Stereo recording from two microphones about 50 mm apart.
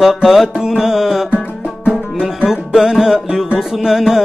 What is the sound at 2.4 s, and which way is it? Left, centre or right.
Music, centre.